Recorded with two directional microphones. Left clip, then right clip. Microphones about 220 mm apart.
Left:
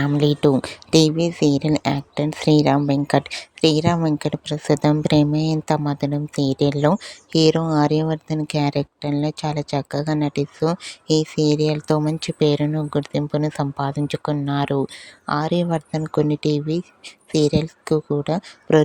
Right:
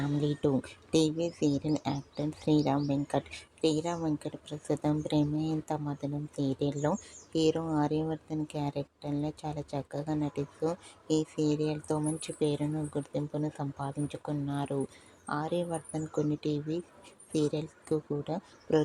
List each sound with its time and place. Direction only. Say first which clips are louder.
0.0 s speech: left 13 dB; 45° left (ahead or behind)